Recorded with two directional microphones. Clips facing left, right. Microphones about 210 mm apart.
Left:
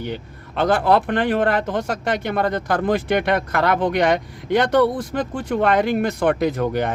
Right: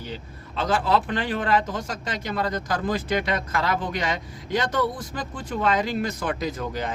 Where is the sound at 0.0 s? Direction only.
60° left (ahead or behind).